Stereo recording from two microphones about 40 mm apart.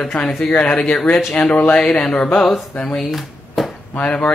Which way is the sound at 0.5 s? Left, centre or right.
Left.